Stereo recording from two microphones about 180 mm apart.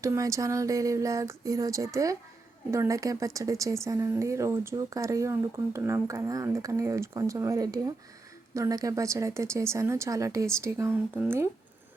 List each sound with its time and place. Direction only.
0.0 s speech: 15° right (ahead or behind)